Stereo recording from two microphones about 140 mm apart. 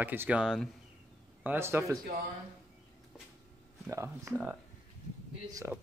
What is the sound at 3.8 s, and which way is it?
Speech, 20° right (ahead or behind).